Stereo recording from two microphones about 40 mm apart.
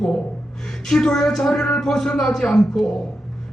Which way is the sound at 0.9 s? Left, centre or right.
Centre.